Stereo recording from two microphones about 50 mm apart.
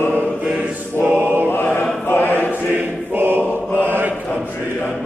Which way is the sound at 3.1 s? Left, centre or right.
Right.